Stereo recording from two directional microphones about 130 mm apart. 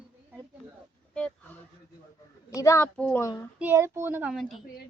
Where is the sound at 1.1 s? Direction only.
5° left (ahead or behind).